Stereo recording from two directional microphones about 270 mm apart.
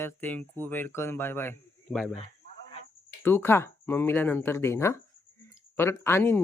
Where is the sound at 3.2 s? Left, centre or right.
Centre.